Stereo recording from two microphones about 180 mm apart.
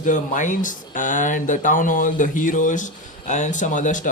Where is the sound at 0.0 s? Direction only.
45° left (ahead or behind).